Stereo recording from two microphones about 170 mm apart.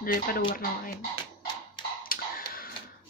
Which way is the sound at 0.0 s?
55° left (ahead or behind).